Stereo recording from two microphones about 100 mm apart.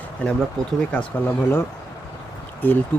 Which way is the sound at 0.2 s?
15° left (ahead or behind).